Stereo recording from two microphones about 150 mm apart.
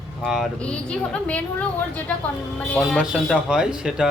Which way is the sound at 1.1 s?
10° left (ahead or behind).